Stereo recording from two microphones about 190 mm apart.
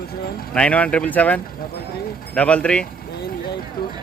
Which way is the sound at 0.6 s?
5° left (ahead or behind).